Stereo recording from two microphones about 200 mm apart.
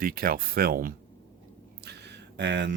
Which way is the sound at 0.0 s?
50° right (ahead or behind).